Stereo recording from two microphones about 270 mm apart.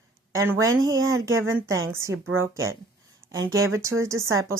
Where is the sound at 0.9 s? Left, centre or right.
Right.